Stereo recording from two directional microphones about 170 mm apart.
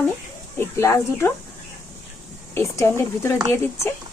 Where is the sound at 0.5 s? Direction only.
15° left (ahead or behind).